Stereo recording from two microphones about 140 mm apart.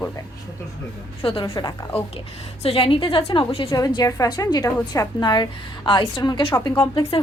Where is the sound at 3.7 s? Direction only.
25° left (ahead or behind).